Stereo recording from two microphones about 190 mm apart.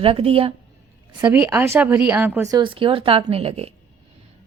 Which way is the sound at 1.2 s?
10° right (ahead or behind).